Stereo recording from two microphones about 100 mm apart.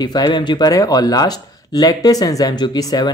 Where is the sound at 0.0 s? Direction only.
45° left (ahead or behind).